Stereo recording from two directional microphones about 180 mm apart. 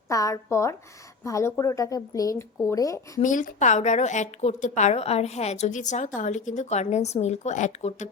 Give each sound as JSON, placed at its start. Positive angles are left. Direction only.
{"t": 0.1, "sound": "speech", "side_deg": 20}
{"t": 3.2, "sound": "a woman's voice", "side_deg": 45}